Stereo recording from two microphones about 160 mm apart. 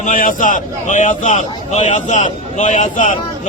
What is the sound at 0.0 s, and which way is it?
A man's voice, 55° left (ahead or behind).